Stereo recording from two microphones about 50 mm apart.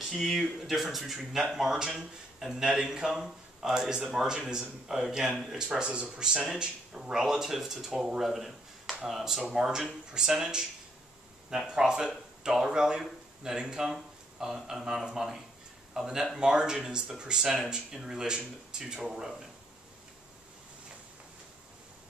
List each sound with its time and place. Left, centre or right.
0.0 s a man's voice: centre